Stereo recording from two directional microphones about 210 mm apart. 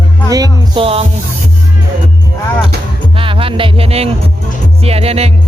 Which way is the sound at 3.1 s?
25° right (ahead or behind).